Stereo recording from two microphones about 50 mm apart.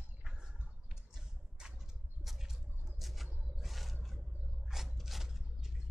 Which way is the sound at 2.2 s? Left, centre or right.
Centre.